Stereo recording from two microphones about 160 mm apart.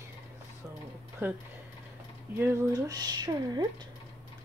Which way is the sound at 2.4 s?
15° right (ahead or behind).